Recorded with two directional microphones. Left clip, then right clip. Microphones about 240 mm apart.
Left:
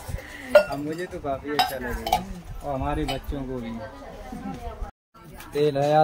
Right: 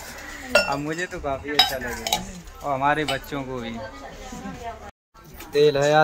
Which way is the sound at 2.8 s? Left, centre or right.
Centre.